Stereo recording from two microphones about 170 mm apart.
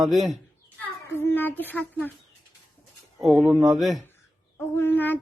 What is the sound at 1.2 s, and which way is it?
Speech, 10° left (ahead or behind).